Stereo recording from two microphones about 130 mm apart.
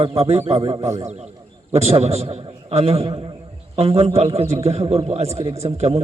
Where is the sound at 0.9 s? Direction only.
60° right (ahead or behind).